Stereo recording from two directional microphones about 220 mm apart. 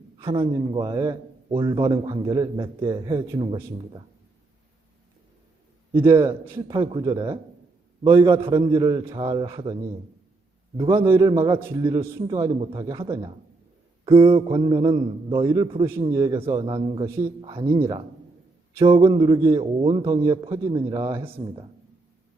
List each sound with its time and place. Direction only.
0.2 s a man's voice: 25° right (ahead or behind)
6.0 s a man's voice: 10° right (ahead or behind)
6.2 s a man's voice: 20° right (ahead or behind)
11.0 s a man's voice: 15° right (ahead or behind)
17.1 s a man's voice: 10° right (ahead or behind)
18.8 s a man's voice: 25° right (ahead or behind)